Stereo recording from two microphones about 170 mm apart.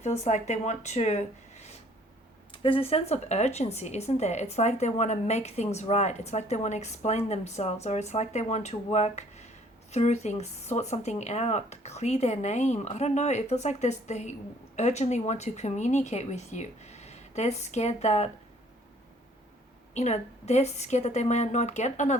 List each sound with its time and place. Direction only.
0.0 s speech: 45° left (ahead or behind)
19.9 s speech: 40° left (ahead or behind)